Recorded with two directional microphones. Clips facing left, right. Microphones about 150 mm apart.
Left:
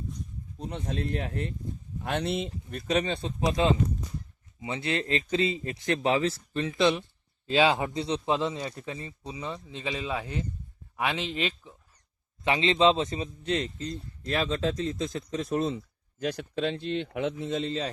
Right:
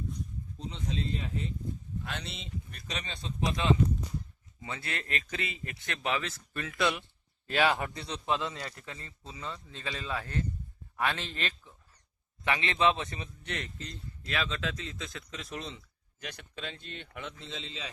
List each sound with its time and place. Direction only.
0.6 s speech: 60° left (ahead or behind)
2.5 s a man's voice: 45° left (ahead or behind)
6.6 s a man's voice: 20° left (ahead or behind)
14.3 s speech: 35° left (ahead or behind)
15.4 s a man's voice: 50° left (ahead or behind)
16.8 s speech: 50° right (ahead or behind)
17.1 s a man's voice: 55° left (ahead or behind)